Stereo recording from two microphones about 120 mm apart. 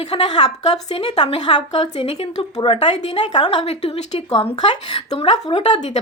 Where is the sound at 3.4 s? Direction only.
55° left (ahead or behind).